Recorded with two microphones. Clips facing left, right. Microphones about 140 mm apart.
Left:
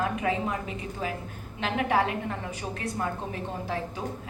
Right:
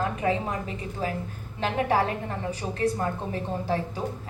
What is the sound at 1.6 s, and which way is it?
A woman's voice, 35° right (ahead or behind).